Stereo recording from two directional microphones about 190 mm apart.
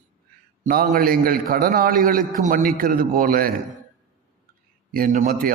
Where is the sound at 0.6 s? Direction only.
50° right (ahead or behind).